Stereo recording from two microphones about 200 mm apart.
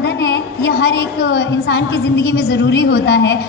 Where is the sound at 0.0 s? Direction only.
60° left (ahead or behind).